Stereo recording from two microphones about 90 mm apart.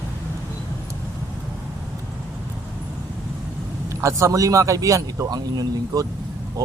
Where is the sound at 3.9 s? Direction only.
35° right (ahead or behind).